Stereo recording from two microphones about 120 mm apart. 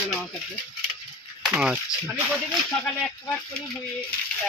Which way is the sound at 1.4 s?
5° right (ahead or behind).